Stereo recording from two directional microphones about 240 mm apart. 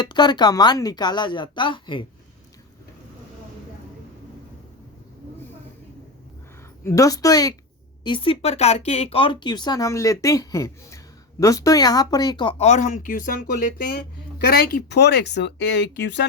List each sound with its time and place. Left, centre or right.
0.0 s speech: centre
6.8 s speech: centre; by 15.6 s left